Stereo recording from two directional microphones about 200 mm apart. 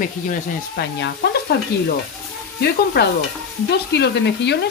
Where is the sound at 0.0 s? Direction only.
50° left (ahead or behind).